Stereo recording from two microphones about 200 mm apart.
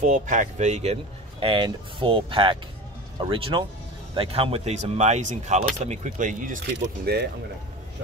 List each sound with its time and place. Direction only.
0.0 s speech: 40° right (ahead or behind)
1.4 s speech: 25° right (ahead or behind); by 6.6 s 40° right (ahead or behind)
6.7 s speech: 55° right (ahead or behind)